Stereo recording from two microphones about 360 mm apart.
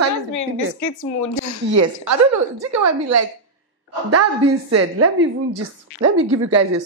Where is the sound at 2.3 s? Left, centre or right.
Right.